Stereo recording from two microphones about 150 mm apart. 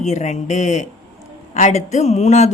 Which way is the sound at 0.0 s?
50° left (ahead or behind).